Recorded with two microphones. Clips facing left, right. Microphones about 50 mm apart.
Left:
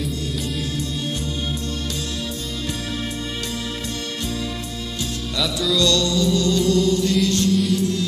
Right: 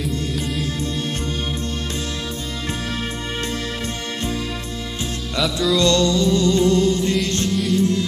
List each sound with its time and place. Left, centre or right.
5.4 s music: centre
5.8 s music: right